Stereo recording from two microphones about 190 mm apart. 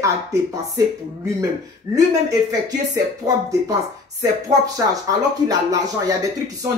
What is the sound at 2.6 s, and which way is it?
Speech, 20° right (ahead or behind).